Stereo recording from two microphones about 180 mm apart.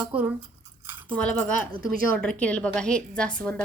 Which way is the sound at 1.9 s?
5° left (ahead or behind).